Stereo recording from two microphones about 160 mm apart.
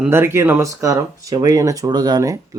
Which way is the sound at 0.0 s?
15° right (ahead or behind).